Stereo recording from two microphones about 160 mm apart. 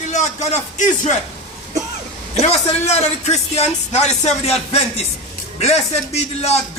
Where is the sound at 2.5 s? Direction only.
40° left (ahead or behind).